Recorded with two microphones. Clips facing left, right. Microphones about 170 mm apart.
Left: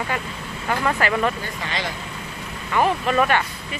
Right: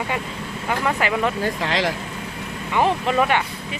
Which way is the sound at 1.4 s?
90° right.